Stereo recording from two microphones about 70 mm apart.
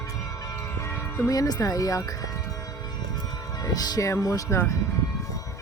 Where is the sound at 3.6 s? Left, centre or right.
Left.